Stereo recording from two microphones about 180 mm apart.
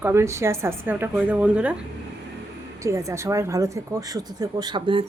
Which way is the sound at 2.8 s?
15° right (ahead or behind).